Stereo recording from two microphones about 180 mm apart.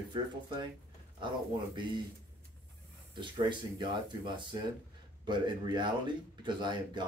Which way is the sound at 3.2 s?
25° right (ahead or behind).